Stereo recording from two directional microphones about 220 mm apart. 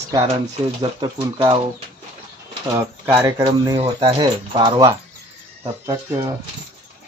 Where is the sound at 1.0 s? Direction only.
20° right (ahead or behind).